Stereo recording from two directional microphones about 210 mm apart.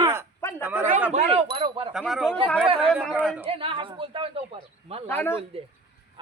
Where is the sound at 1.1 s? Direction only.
30° right (ahead or behind).